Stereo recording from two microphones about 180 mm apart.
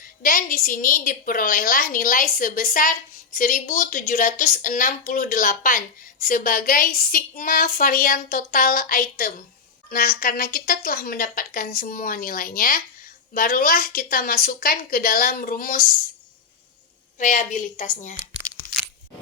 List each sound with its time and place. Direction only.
0.2 s a woman's voice: 50° left (ahead or behind)
17.2 s a woman's voice: 45° left (ahead or behind)